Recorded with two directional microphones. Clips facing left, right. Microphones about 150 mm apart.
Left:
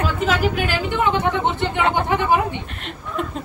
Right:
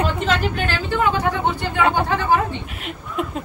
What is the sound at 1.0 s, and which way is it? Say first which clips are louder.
Speech: even; 25° left (ahead or behind).